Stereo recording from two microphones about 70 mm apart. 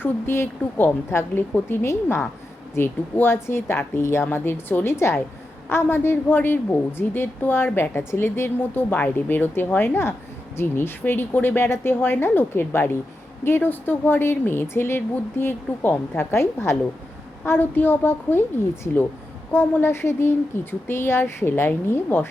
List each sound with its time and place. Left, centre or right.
0.0 s a woman's voice: left
0.6 s a woman's voice: left